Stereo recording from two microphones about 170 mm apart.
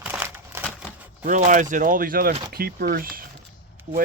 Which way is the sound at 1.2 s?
50° right (ahead or behind).